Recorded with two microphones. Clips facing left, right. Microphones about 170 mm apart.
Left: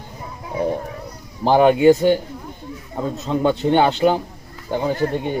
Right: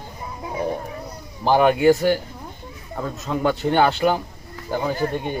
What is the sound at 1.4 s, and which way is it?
Speech, 25° left (ahead or behind).